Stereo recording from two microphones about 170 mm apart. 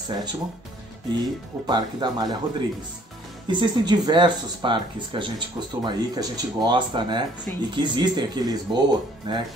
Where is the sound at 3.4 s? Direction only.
25° right (ahead or behind).